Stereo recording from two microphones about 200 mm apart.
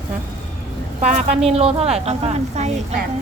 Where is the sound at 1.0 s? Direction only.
35° right (ahead or behind).